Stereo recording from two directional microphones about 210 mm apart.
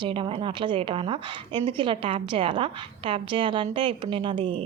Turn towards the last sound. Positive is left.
turn(degrees=-25)  # may be behind; listen again after turning